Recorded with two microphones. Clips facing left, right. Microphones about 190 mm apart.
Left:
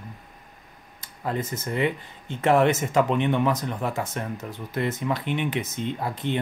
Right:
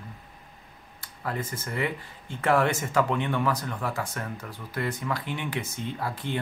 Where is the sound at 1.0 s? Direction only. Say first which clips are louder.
Left 4 dB; 20° left (ahead or behind).